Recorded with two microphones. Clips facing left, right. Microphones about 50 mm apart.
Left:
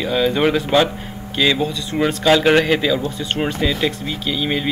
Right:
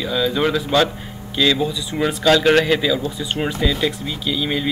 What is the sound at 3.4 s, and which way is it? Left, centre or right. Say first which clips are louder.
Speech: left 1 dB; centre.